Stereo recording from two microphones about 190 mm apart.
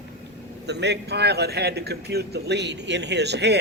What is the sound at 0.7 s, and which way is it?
Speech, 65° right (ahead or behind).